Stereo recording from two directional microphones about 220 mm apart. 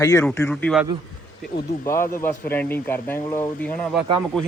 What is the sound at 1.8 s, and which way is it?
Speech, 10° left (ahead or behind).